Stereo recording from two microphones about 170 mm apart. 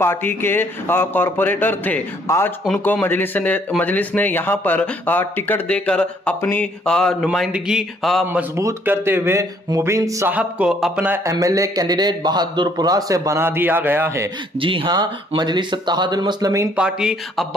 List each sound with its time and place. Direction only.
0.0 s speech: 15° left (ahead or behind)
8.3 s speech: 15° right (ahead or behind)
14.6 s speech: 30° right (ahead or behind)
16.7 s speech: 5° right (ahead or behind)